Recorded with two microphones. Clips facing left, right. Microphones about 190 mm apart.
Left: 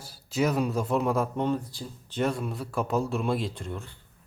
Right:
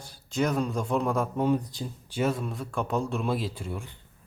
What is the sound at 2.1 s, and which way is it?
A man's voice, centre (ahead or behind).